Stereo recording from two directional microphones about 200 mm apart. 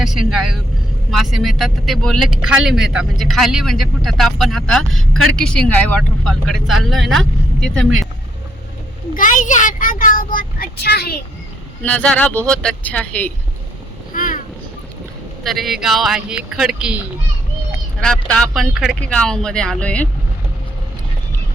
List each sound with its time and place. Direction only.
0.0 s vehicle: centre (ahead or behind)
1.2 s speech: centre (ahead or behind)
9.1 s speech: 40° left (ahead or behind)
11.8 s speech: 5° left (ahead or behind)
14.1 s vehicle: 40° left (ahead or behind)
15.4 s speech: centre (ahead or behind)
18.0 s speech: 5° left (ahead or behind)